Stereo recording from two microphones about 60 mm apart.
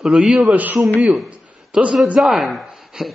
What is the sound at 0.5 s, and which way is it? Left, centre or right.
Speech, right.